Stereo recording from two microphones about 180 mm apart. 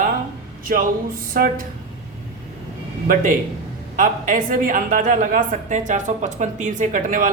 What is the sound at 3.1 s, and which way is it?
A woman's voice, 45° right (ahead or behind).